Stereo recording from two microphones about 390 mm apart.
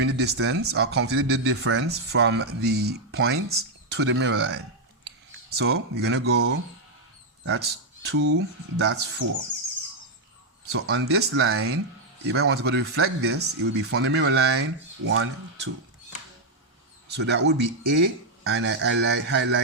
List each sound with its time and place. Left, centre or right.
0.0 s speech: right
10.7 s speech: right
17.1 s speech: right